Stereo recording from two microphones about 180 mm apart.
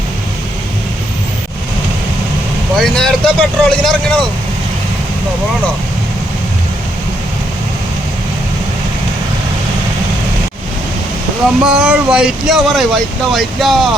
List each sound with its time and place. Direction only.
2.7 s speech: 5° left (ahead or behind)
11.6 s speech: 5° right (ahead or behind)